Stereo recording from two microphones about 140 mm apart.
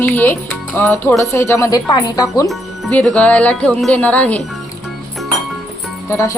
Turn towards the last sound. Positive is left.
turn(degrees=20)  # may be behind; listen again after turning